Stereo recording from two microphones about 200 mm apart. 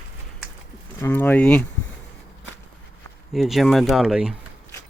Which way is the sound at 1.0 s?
10° left (ahead or behind).